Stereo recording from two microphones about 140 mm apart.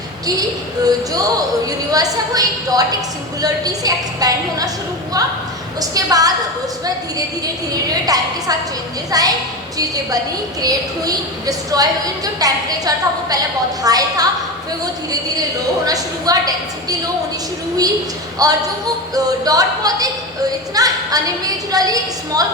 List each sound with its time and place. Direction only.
0.9 s a woman's voice: 25° right (ahead or behind)
5.8 s a woman's voice: 25° right (ahead or behind)
7.9 s a woman's voice: 25° right (ahead or behind)
15.9 s a woman's voice: 25° right (ahead or behind)
18.4 s a woman's voice: 25° right (ahead or behind)